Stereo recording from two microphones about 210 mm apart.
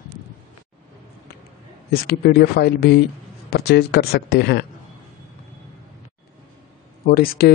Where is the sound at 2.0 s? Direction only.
45° left (ahead or behind).